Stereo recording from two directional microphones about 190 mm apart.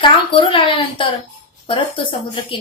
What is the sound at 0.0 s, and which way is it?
A child's voice, 25° left (ahead or behind).